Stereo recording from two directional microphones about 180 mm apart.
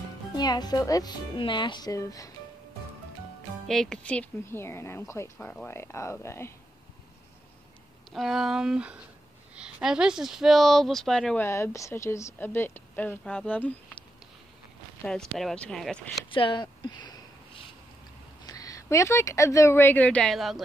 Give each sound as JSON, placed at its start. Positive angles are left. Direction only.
{"t": 0.4, "sound": "speech", "side_deg": 20}
{"t": 3.6, "sound": "a woman's voice", "side_deg": 5}
{"t": 8.1, "sound": "speech", "side_deg": 0}
{"t": 11.4, "sound": "a woman's voice", "side_deg": 15}
{"t": 15.0, "sound": "speech", "side_deg": 0}
{"t": 16.3, "sound": "speech", "side_deg": 30}
{"t": 18.4, "sound": "speech", "side_deg": 20}